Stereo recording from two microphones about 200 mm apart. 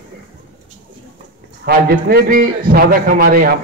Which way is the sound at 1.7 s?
50° right (ahead or behind).